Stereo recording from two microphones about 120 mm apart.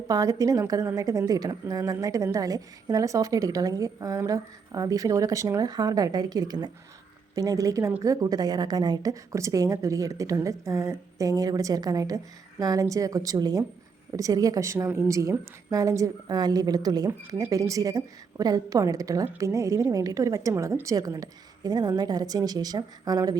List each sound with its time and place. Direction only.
0.1 s a woman's voice: 30° right (ahead or behind)